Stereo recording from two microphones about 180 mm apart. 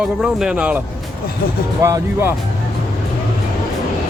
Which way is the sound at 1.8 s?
15° right (ahead or behind).